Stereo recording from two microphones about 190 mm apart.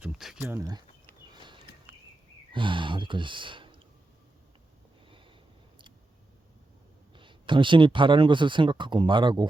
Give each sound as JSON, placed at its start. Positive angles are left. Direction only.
{"t": 0.0, "sound": "speech", "side_deg": 0}
{"t": 0.5, "sound": "speech", "side_deg": -20}
{"t": 1.3, "sound": "a sound", "side_deg": -25}
{"t": 2.5, "sound": "speech", "side_deg": -25}
{"t": 7.2, "sound": "speech", "side_deg": -25}